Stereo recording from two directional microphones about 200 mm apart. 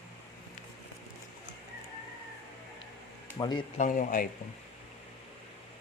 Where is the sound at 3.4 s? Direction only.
20° left (ahead or behind).